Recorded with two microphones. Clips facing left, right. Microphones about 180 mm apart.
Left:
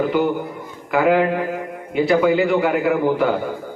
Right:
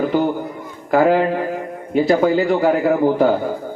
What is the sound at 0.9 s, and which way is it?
A man's voice, 40° right (ahead or behind).